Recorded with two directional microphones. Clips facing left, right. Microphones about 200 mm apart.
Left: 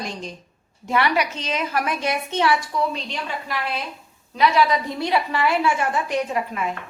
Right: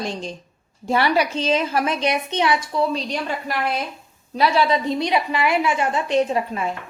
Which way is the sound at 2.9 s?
40° right (ahead or behind).